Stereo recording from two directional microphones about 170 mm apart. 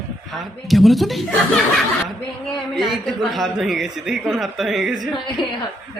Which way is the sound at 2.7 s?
Centre (ahead or behind).